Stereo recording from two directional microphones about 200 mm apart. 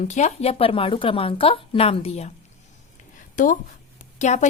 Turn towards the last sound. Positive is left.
turn(degrees=35)  # may be behind; listen again after turning